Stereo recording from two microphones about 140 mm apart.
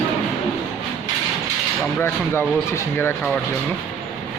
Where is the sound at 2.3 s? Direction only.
15° left (ahead or behind).